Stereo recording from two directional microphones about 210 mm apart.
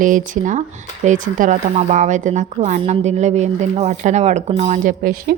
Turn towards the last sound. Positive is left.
turn(degrees=-45)  # may be behind; listen again after turning